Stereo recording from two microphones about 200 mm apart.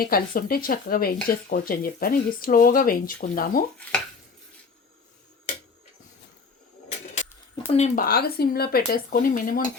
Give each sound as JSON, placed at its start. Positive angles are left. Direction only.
{"t": 0.0, "sound": "speech", "side_deg": 45}
{"t": 7.7, "sound": "speech", "side_deg": 35}
{"t": 8.0, "sound": "speech", "side_deg": 50}